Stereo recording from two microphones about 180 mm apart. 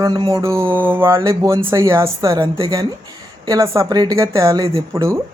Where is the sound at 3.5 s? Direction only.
15° right (ahead or behind).